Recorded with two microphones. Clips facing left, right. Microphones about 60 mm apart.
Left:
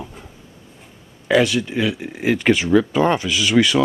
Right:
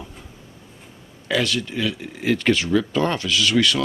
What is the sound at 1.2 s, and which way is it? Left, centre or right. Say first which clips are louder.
Speech: left 6 dB; centre.